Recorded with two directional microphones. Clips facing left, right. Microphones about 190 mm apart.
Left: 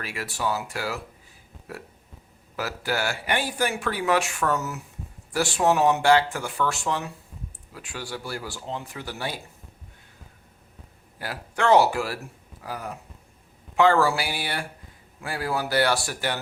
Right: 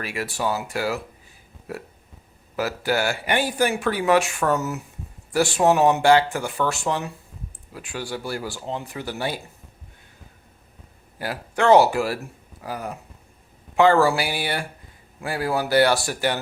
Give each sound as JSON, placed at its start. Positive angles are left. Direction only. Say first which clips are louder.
{"t": 0.0, "sound": "speech", "louder": "right 3 dB", "side_deg": -15}
{"t": 2.6, "sound": "speech", "louder": "right 5 dB", "side_deg": -15}
{"t": 11.2, "sound": "speech", "louder": "right 4 dB", "side_deg": -15}
{"t": 13.7, "sound": "speech", "louder": "right 3 dB", "side_deg": -20}